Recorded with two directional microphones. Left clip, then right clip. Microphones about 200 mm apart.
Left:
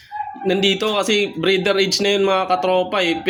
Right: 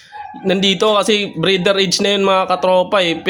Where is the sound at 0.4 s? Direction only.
35° right (ahead or behind).